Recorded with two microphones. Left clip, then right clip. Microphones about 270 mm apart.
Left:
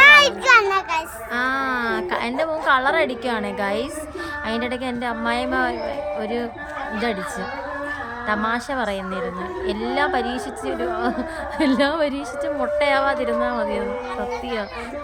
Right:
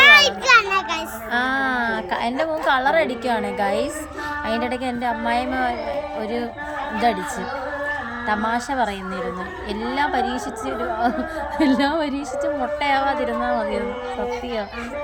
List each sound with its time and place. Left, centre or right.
0.0 s a sound: centre
1.3 s a woman's voice: centre
8.3 s a woman's voice: centre